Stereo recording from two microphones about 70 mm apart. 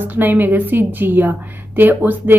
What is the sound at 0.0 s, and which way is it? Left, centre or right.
A woman's voice, right.